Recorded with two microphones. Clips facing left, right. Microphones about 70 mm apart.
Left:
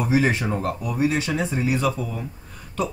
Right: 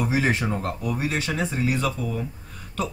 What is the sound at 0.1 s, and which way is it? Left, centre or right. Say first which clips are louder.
Speech: left 3 dB; centre.